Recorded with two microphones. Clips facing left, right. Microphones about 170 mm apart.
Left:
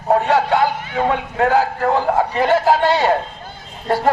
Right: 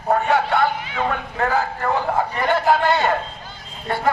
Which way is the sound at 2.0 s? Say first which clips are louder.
Left 4 dB; 40° left (ahead or behind).